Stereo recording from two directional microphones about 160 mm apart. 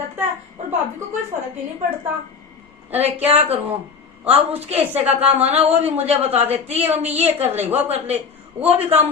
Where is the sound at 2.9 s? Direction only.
40° right (ahead or behind).